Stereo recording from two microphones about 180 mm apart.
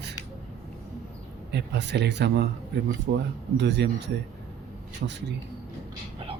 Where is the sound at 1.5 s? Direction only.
70° right (ahead or behind).